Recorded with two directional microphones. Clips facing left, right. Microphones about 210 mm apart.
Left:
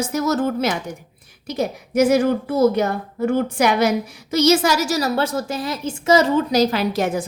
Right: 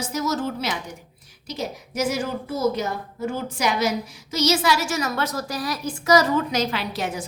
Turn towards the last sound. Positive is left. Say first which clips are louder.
# left 7 dB
turn(degrees=50)  # may be behind; listen again after turning